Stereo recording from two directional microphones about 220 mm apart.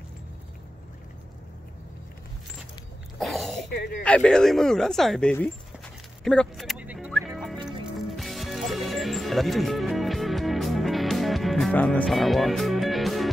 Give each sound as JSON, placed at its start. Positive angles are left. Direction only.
{"t": 3.2, "sound": "a sound", "side_deg": 0}
{"t": 3.7, "sound": "speech", "side_deg": 45}
{"t": 4.0, "sound": "speech", "side_deg": 5}
{"t": 6.2, "sound": "music", "side_deg": 5}